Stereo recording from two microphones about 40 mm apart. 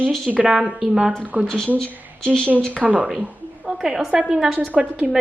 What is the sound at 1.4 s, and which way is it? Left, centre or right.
Speech, centre.